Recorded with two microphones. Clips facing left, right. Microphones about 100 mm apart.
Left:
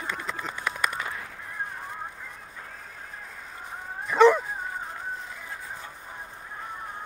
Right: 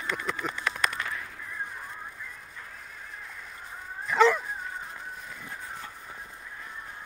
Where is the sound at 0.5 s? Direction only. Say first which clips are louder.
Left 1 dB; 15° left (ahead or behind).